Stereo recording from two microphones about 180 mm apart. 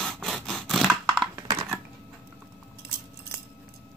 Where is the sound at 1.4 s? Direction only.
15° right (ahead or behind).